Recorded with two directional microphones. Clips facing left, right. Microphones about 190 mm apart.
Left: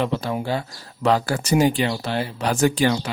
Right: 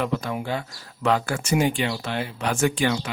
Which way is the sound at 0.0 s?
30° left (ahead or behind).